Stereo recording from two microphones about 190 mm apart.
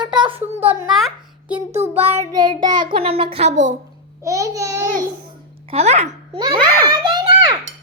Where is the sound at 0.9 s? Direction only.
Centre (ahead or behind).